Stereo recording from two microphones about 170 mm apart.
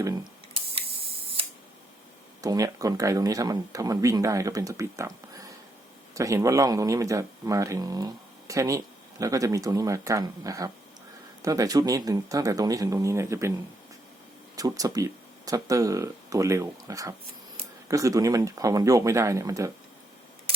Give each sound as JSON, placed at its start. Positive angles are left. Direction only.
{"t": 0.5, "sound": "camera", "side_deg": -35}
{"t": 2.4, "sound": "speech", "side_deg": -20}
{"t": 14.5, "sound": "speech", "side_deg": -20}